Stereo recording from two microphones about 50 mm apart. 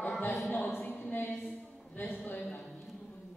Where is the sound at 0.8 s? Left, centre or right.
Left.